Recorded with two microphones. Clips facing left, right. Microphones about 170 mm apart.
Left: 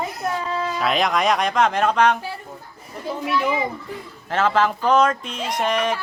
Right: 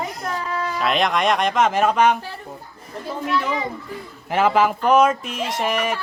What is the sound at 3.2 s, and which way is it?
Speech, 10° left (ahead or behind).